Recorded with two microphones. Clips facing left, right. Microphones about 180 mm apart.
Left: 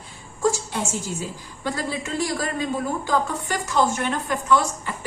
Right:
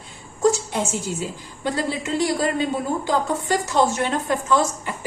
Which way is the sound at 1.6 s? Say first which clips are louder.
Right 3 dB; 25° right (ahead or behind).